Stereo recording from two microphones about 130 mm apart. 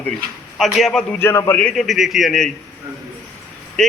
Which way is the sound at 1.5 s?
5° left (ahead or behind).